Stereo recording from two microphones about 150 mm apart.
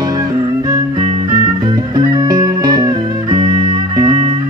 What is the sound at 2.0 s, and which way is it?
Music, 30° right (ahead or behind).